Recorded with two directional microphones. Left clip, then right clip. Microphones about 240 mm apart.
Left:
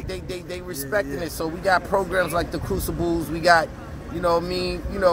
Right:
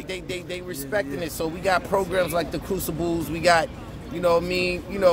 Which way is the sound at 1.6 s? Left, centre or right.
Centre.